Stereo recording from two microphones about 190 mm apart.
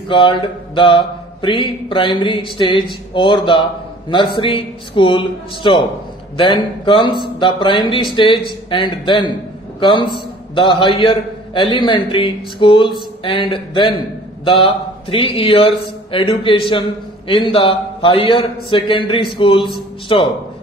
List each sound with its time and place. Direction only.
0.1 s a man's voice: 25° left (ahead or behind)